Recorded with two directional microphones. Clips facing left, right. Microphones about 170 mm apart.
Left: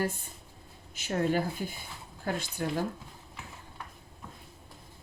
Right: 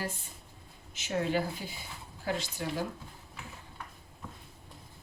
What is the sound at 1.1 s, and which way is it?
Speech, 50° left (ahead or behind).